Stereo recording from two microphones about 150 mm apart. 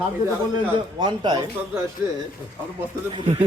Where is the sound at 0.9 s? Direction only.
30° right (ahead or behind).